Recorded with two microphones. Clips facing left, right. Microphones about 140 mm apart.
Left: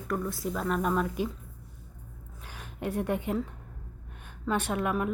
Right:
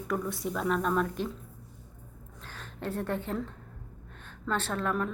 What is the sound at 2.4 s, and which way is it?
A woman's voice, 10° left (ahead or behind).